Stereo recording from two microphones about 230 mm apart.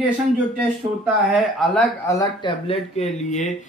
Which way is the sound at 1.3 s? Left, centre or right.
Centre.